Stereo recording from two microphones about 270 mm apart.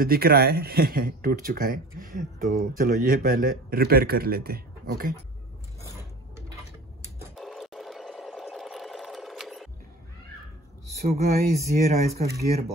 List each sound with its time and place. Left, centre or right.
0.0 s speech: right
7.2 s sewing machine: centre
11.0 s speech: right